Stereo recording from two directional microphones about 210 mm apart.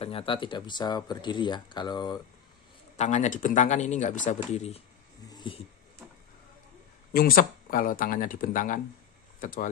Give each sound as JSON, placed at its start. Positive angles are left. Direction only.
{"t": 0.0, "sound": "speech", "side_deg": 25}
{"t": 3.0, "sound": "speech", "side_deg": 35}
{"t": 5.3, "sound": "a sound", "side_deg": 20}
{"t": 7.1, "sound": "speech", "side_deg": 45}